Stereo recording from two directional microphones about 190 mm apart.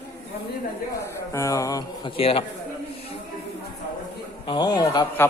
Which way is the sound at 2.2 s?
30° left (ahead or behind).